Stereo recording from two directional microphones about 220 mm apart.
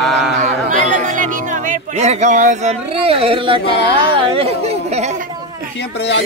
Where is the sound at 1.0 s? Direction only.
35° right (ahead or behind).